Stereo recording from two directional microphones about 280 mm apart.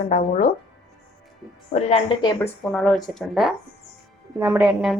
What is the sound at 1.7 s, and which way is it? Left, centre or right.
Speech, left.